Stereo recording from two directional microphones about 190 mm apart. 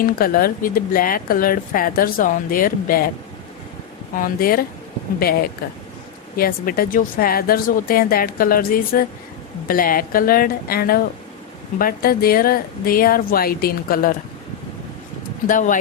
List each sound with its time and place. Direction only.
0.0 s speech: 50° left (ahead or behind)
4.2 s speech: 50° left (ahead or behind)
15.4 s speech: 45° left (ahead or behind)